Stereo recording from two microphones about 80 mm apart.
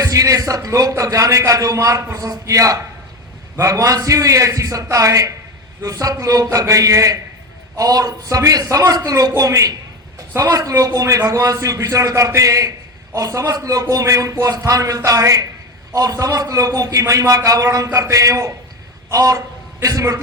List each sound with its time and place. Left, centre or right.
0.0 s a man's voice: right